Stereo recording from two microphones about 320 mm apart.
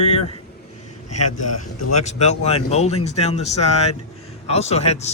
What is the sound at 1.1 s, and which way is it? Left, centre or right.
Speech, left.